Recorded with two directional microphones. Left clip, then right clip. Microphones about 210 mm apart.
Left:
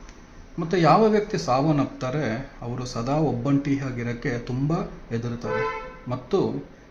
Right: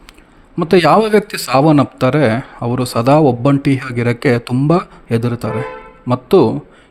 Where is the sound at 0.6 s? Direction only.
50° right (ahead or behind).